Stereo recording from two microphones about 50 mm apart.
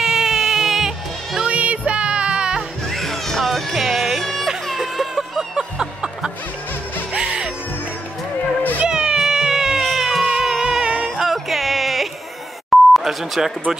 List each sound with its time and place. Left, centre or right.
0.0 s music: centre
1.4 s music: right
2.9 s music: centre
4.2 s music: centre
7.2 s music: centre
8.8 s cat: centre
9.8 s a sound: centre
10.2 s music: centre
11.2 s a sound: centre
12.6 s beep: centre